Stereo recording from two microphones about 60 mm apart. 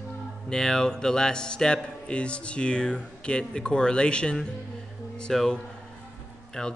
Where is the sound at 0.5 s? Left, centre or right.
Centre.